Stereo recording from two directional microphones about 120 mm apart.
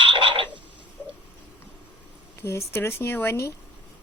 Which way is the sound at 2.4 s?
20° left (ahead or behind).